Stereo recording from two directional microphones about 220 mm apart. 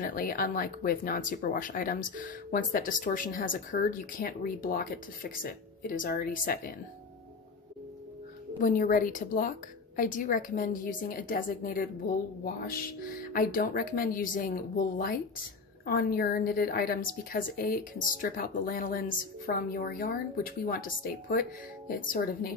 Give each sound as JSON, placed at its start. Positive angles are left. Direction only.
{"t": 0.0, "sound": "a woman's voice", "side_deg": 40}
{"t": 8.5, "sound": "a woman's voice", "side_deg": 40}
{"t": 13.2, "sound": "a woman's voice", "side_deg": 40}